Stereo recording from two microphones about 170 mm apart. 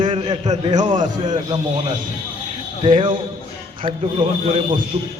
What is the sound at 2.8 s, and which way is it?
Speech, 30° right (ahead or behind).